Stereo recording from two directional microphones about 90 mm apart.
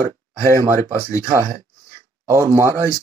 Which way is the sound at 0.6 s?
35° right (ahead or behind).